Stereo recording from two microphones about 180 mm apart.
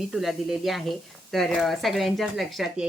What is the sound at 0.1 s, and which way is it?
Speech, centre (ahead or behind).